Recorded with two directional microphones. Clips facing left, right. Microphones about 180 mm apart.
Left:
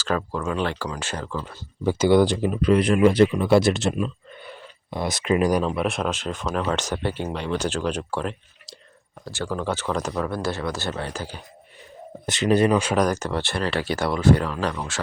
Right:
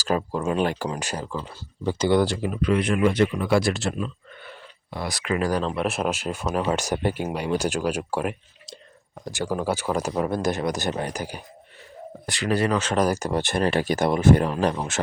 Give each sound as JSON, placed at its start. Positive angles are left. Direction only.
{"t": 0.2, "sound": "speech", "side_deg": -20}
{"t": 1.8, "sound": "speech", "side_deg": 10}
{"t": 2.6, "sound": "speech", "side_deg": 35}
{"t": 5.7, "sound": "speech", "side_deg": 0}
{"t": 12.2, "sound": "speech", "side_deg": 20}
{"t": 13.0, "sound": "speech", "side_deg": -10}